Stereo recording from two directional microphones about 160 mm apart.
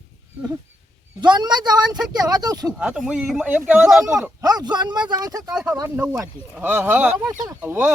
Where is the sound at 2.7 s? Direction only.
5° right (ahead or behind).